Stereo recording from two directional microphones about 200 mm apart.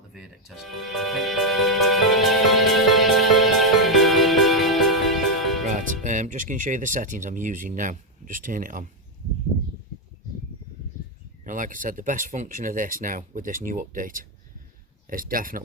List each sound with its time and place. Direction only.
0.1 s music: centre (ahead or behind)
5.6 s speech: 40° right (ahead or behind)
11.4 s speech: 40° right (ahead or behind)